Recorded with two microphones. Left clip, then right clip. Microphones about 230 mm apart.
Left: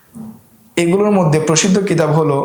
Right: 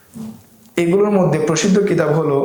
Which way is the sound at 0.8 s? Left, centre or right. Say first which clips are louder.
Left 1 dB; left.